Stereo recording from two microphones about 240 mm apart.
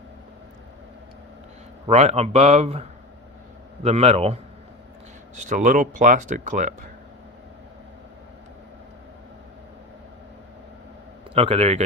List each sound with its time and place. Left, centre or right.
1.9 s a man's voice: right
3.8 s a man's voice: right
5.5 s speech: right
11.3 s a man's voice: right